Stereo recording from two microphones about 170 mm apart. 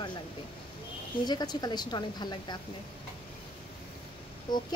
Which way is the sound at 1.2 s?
25° left (ahead or behind).